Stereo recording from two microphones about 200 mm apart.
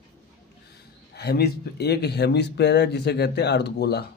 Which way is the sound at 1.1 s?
55° left (ahead or behind).